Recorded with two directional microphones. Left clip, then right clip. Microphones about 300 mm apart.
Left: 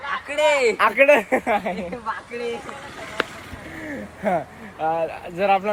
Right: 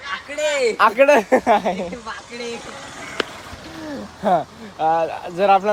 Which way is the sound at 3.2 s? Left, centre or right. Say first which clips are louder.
Right 1 dB; centre.